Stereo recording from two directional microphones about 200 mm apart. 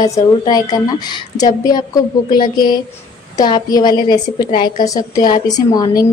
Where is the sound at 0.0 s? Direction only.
20° left (ahead or behind).